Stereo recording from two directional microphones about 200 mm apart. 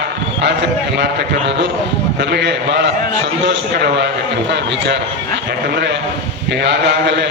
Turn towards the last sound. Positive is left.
turn(degrees=-60)  # may be behind; listen again after turning